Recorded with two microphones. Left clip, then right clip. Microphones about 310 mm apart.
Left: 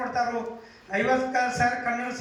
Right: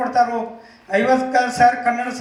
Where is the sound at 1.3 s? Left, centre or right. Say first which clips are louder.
Right 9 dB; right.